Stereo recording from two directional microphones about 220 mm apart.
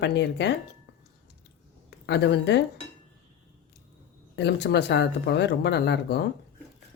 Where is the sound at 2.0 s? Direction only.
50° left (ahead or behind).